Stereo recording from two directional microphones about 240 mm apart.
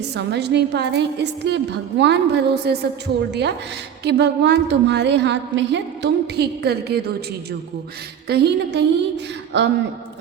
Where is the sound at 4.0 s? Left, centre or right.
Right.